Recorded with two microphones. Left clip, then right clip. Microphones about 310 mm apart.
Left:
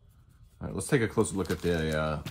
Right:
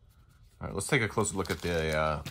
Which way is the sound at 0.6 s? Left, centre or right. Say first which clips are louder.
Left 1 dB; right.